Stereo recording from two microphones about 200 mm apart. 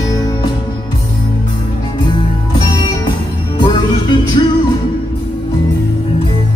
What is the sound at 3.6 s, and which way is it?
Music, 25° left (ahead or behind).